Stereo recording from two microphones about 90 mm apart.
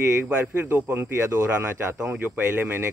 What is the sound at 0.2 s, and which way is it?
Speech, 25° right (ahead or behind).